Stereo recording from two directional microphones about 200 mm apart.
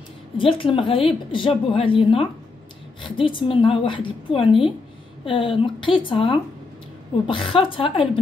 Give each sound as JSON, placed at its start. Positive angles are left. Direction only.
{"t": 0.4, "sound": "a woman's voice", "side_deg": 25}